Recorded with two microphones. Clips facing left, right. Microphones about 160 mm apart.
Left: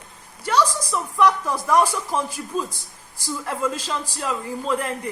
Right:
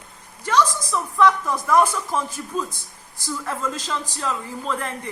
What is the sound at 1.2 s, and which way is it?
Speech, 10° left (ahead or behind).